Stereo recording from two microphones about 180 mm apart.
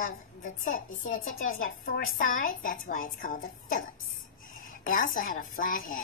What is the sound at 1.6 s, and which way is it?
A child's voice, 55° left (ahead or behind).